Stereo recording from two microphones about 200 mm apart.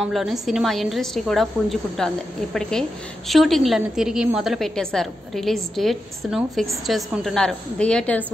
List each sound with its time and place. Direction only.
0.0 s a woman's voice: centre (ahead or behind)